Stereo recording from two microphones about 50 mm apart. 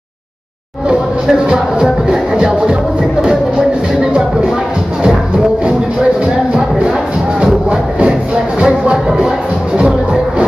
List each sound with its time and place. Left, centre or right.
0.8 s music: centre
6.5 s music: centre